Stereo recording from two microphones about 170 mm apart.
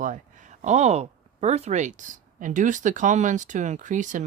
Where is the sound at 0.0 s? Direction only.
50° right (ahead or behind).